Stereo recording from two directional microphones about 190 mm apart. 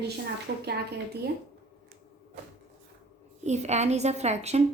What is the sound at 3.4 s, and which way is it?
A woman's voice, 35° right (ahead or behind).